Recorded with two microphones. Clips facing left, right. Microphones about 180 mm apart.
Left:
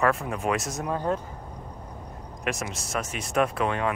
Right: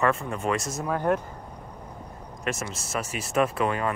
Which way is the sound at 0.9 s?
65° right (ahead or behind).